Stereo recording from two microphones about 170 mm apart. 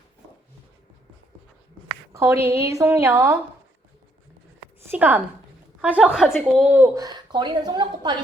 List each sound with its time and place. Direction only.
2.1 s speech: 15° right (ahead or behind)
4.9 s speech: 10° right (ahead or behind); by 8.1 s 25° right (ahead or behind)